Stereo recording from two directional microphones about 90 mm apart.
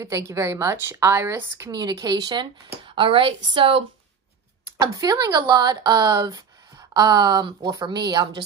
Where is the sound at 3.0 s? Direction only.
80° right.